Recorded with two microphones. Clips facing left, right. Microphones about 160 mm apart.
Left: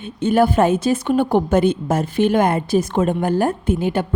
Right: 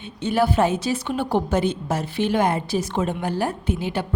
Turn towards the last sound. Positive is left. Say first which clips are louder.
# left 6 dB
turn(degrees=50)  # may be behind; listen again after turning